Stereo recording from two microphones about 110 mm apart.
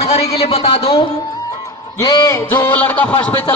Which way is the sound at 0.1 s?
70° left (ahead or behind).